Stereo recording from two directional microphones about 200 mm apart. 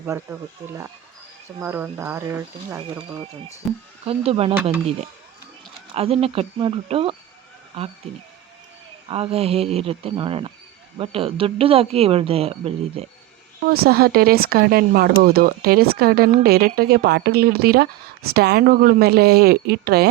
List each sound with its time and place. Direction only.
0.0 s speech: 15° right (ahead or behind)
2.9 s speech: 25° right (ahead or behind)
5.9 s speech: 30° right (ahead or behind)
9.0 s speech: 30° right (ahead or behind)
13.7 s speech: 50° right (ahead or behind)